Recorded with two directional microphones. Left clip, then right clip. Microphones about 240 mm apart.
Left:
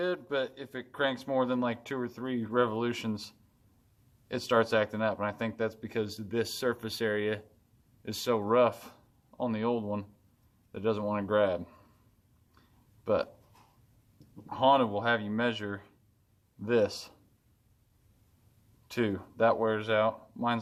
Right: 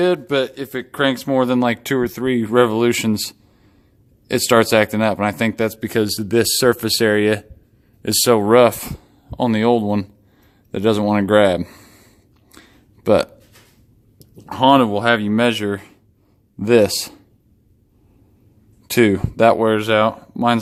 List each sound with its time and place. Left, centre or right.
0.0 s a man's voice: right
13.0 s a man's voice: right
14.5 s a man's voice: right
18.9 s a man's voice: right